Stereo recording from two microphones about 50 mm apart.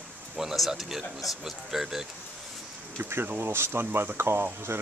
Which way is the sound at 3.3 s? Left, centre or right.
Right.